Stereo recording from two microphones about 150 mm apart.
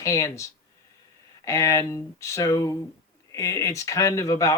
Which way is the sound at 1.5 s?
20° left (ahead or behind).